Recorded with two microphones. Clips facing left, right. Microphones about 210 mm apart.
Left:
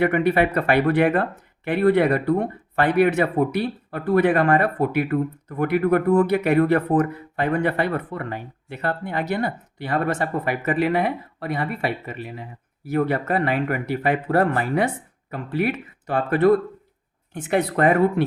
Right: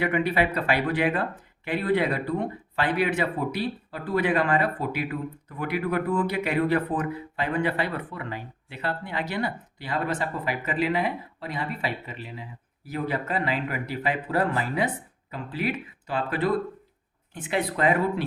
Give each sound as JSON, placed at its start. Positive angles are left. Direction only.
{"t": 0.0, "sound": "speech", "side_deg": 50}